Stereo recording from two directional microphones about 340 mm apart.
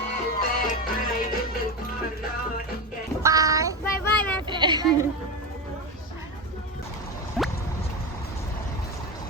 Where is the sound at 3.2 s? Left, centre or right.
Centre.